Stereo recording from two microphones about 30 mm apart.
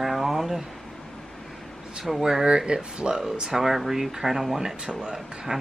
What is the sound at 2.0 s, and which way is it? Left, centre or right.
Speech, centre.